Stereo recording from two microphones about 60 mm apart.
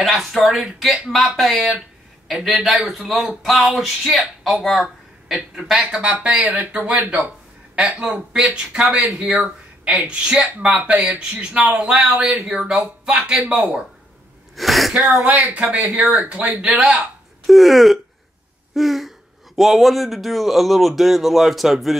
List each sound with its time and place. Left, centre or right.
0.0 s speech: centre
5.8 s speech: centre
10.0 s speech: centre
11.1 s speech: centre
13.6 s speech: right
14.5 s speech: centre
15.2 s speech: right
16.7 s speech: centre